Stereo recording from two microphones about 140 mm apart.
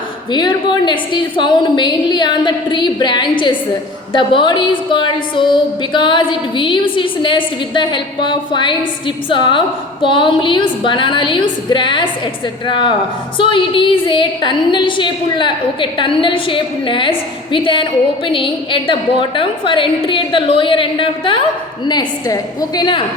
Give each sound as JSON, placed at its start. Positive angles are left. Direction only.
{"t": 0.3, "sound": "a woman's voice", "side_deg": 35}